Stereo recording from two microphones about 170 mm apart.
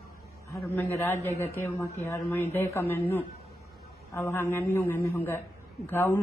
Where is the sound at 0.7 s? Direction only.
15° left (ahead or behind).